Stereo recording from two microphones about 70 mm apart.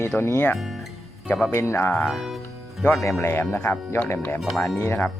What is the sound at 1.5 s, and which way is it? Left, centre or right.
Speech, left.